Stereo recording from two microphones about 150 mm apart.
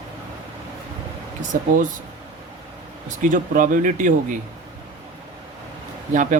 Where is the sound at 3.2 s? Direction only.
55° right (ahead or behind).